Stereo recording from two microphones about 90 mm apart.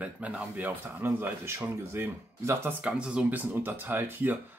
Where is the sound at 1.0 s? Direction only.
30° right (ahead or behind).